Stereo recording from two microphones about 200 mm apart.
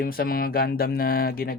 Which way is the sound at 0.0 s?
45° left (ahead or behind).